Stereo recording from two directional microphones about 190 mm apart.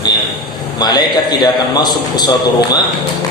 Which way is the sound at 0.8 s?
20° left (ahead or behind).